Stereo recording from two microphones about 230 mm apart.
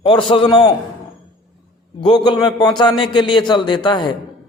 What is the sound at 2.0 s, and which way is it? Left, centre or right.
A man's voice, centre.